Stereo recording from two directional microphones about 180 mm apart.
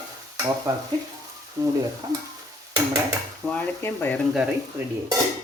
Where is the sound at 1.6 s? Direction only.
20° right (ahead or behind).